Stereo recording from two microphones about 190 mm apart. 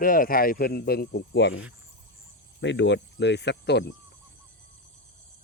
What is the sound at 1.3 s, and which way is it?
Speech, 80° left.